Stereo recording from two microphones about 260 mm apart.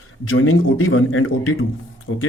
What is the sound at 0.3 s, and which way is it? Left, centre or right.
Speech, left.